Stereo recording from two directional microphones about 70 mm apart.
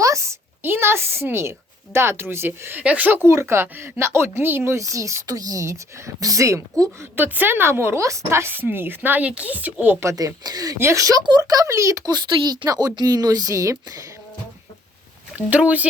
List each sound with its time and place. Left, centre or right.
0.0 s a sound: right
0.7 s a woman's voice: right
2.8 s a woman's voice: right
4.8 s speech: right
7.2 s a woman's voice: right
10.2 s speech: right
10.9 s a woman's voice: right
11.7 s speech: right
12.1 s a woman's voice: right
12.6 s a woman's voice: right
15.4 s speech: right